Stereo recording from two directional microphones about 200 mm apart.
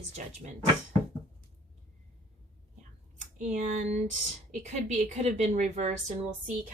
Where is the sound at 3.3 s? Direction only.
35° right (ahead or behind).